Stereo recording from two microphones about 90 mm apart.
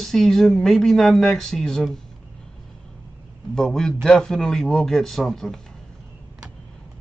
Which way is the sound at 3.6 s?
5° left (ahead or behind).